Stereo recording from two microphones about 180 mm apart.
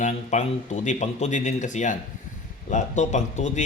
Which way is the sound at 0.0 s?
40° left (ahead or behind).